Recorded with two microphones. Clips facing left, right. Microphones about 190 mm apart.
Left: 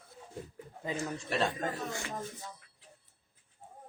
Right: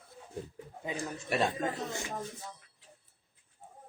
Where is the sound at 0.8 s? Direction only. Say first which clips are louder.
Even; 15° right (ahead or behind).